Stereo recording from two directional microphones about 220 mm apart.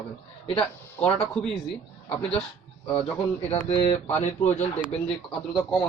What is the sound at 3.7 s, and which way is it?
Speech, 30° left (ahead or behind).